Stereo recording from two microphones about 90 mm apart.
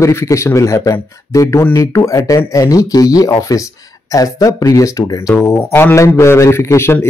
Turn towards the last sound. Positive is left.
turn(degrees=30)  # may be behind; listen again after turning